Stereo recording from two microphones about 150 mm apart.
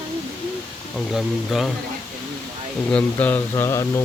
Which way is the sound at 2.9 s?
10° left (ahead or behind).